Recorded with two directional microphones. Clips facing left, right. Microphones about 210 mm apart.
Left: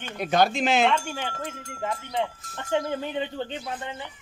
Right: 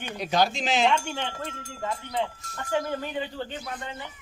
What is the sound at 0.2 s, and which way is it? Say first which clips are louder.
Speech: left 3 dB; 55° left (ahead or behind).